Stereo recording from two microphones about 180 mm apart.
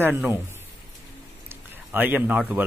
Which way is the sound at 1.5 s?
10° right (ahead or behind).